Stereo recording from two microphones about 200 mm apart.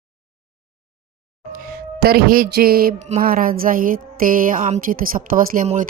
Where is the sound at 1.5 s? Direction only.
50° right (ahead or behind).